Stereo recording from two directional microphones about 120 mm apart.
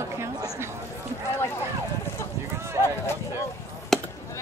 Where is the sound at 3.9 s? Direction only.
Centre (ahead or behind).